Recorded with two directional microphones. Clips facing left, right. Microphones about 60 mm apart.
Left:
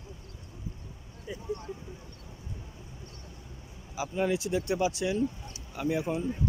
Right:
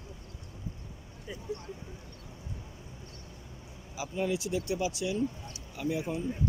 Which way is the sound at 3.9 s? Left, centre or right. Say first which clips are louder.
Left 3 dB; left.